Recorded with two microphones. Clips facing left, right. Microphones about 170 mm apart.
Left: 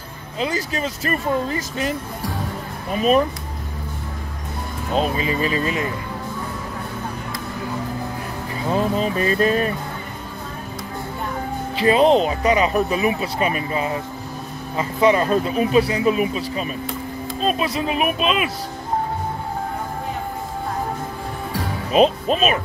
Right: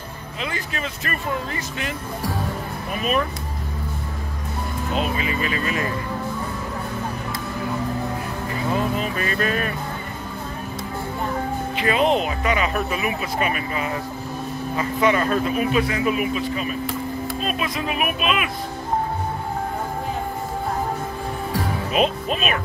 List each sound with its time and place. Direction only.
0.4 s speech: 35° left (ahead or behind)
4.9 s speech: 35° left (ahead or behind)
8.9 s speech: 30° left (ahead or behind)
11.7 s speech: 30° left (ahead or behind)
21.9 s speech: 35° left (ahead or behind)